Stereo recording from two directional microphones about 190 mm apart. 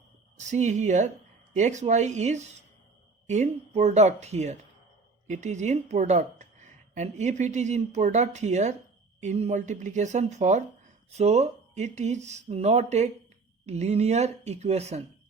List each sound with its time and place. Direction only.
0.3 s a woman's voice: 40° right (ahead or behind)